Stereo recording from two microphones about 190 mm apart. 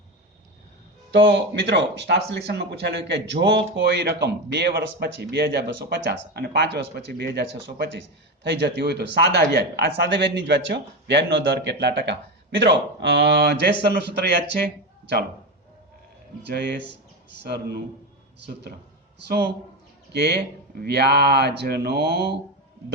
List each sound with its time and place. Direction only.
1.3 s a man's voice: 65° right (ahead or behind)
16.5 s a man's voice: 60° right (ahead or behind)
19.3 s a man's voice: 55° right (ahead or behind)